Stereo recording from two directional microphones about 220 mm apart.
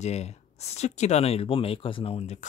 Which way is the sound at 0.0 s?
30° left (ahead or behind).